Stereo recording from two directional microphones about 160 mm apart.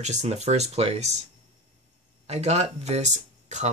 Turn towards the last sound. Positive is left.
turn(degrees=-45)  # may be behind; listen again after turning